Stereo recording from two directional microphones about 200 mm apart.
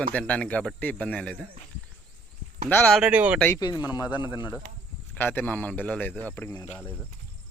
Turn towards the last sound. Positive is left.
turn(degrees=10)  # may be behind; listen again after turning